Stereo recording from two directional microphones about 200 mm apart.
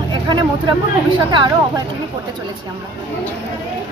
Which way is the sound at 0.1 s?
20° right (ahead or behind).